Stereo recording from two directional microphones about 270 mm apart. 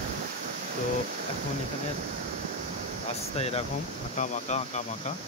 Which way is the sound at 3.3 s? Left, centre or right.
Left.